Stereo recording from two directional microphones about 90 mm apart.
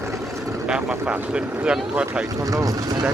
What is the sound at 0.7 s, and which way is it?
Speech, 15° right (ahead or behind).